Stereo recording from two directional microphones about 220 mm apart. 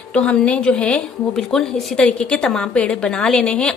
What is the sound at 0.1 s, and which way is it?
A woman's voice, 5° left (ahead or behind).